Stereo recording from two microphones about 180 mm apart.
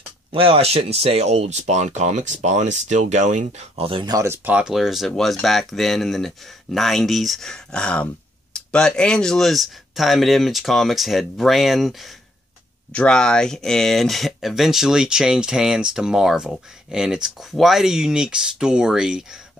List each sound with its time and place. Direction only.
0.3 s speech: 30° right (ahead or behind); by 19.4 s 5° right (ahead or behind)